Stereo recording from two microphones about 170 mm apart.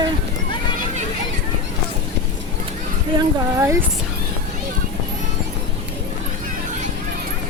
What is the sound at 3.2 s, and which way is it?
Speech, 20° right (ahead or behind).